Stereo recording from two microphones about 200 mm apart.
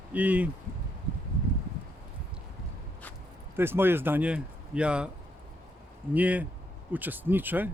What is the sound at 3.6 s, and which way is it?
Speech, 10° right (ahead or behind).